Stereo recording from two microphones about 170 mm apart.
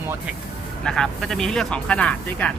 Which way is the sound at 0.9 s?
5° left (ahead or behind).